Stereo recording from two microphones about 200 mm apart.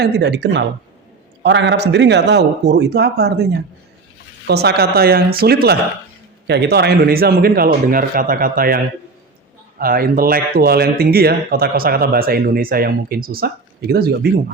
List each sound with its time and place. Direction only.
0.0 s a man's voice: 55° right (ahead or behind)